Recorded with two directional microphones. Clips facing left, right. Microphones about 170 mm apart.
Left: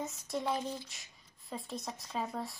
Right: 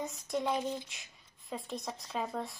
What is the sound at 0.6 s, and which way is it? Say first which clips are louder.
Speech: right 3 dB; 20° right (ahead or behind).